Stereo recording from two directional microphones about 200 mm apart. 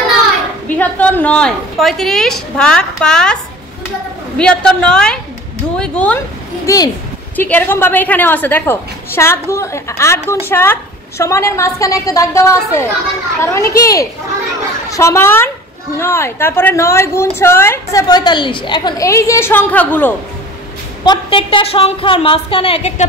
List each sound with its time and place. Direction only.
0.7 s a woman's voice: 5° left (ahead or behind)
4.4 s a woman's voice: 5° left (ahead or behind)
6.6 s a woman's voice: 15° left (ahead or behind)
21.0 s a woman's voice: 20° left (ahead or behind)